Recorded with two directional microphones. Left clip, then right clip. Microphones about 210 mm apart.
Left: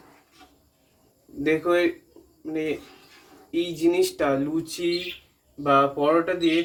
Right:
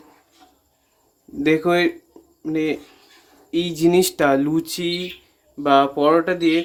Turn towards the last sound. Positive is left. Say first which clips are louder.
# right 4 dB
turn(degrees=-55)  # may be behind; listen again after turning